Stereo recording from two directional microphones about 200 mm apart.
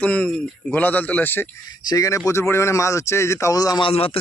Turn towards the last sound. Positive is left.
turn(degrees=30)  # may be behind; listen again after turning